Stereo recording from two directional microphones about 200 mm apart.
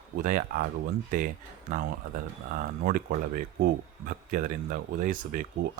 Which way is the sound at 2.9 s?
45° right (ahead or behind).